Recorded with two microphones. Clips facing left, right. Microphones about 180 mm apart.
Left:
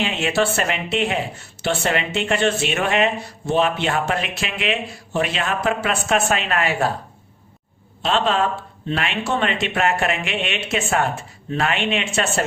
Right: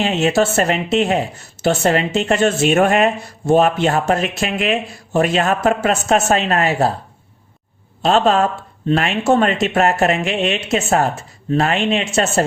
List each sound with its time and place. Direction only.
0.0 s speech: 40° right (ahead or behind)
8.0 s speech: 45° right (ahead or behind)